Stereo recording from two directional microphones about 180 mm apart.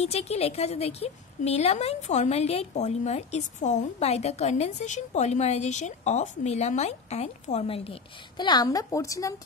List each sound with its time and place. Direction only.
0.0 s a woman's voice: 35° left (ahead or behind)
8.4 s a woman's voice: 20° left (ahead or behind)